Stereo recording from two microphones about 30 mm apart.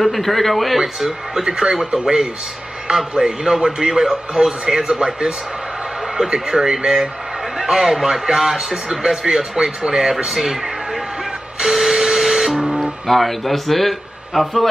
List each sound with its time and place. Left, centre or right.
0.0 s speech: centre
0.7 s speech: centre
1.4 s speech: right
6.1 s speech: right
10.3 s speech: centre
11.6 s printer: centre
13.0 s speech: centre